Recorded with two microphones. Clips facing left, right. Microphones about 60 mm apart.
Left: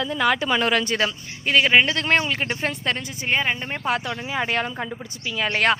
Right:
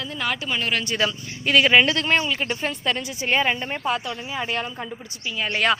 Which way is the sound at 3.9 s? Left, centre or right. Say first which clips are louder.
Left 3 dB; left.